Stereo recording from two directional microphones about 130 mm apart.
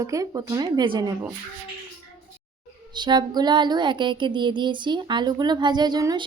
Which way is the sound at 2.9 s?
35° right (ahead or behind).